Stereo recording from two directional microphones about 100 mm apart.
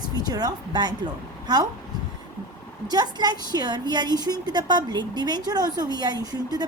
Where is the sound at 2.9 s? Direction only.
45° right (ahead or behind).